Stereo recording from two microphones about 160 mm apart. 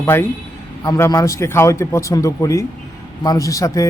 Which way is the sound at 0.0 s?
15° left (ahead or behind).